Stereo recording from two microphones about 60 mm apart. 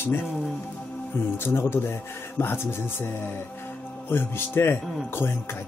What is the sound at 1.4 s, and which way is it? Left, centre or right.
Speech, left.